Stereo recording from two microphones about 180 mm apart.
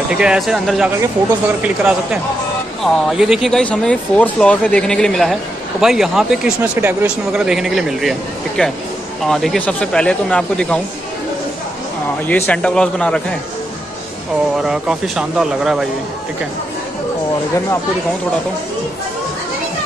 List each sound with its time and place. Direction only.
0.1 s speech: 5° right (ahead or behind)
12.3 s a man's voice: 10° left (ahead or behind)
14.6 s speech: 5° right (ahead or behind)